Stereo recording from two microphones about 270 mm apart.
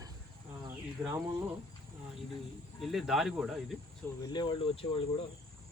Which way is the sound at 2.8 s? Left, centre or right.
Centre.